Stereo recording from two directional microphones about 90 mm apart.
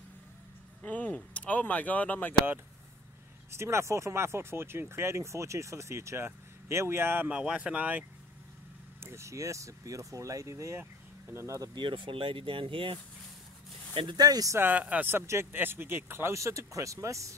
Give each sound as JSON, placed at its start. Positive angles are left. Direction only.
{"t": 0.8, "sound": "speech", "side_deg": 15}
{"t": 3.5, "sound": "speech", "side_deg": -30}
{"t": 7.2, "sound": "speech", "side_deg": -10}
{"t": 9.0, "sound": "speech", "side_deg": -30}
{"t": 11.7, "sound": "speech", "side_deg": -65}
{"t": 14.1, "sound": "speech", "side_deg": -45}
{"t": 14.6, "sound": "speech", "side_deg": -20}